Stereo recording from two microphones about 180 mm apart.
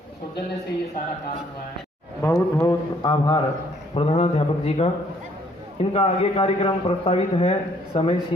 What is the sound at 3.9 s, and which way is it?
A man's voice, 35° left (ahead or behind).